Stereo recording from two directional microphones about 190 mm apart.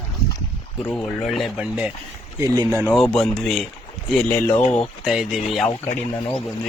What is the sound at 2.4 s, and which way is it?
Speech, 15° right (ahead or behind).